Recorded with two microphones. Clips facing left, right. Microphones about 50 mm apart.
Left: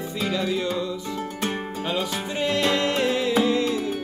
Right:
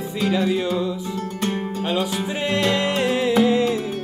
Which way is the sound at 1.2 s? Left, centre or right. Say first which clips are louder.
Right 2 dB; centre.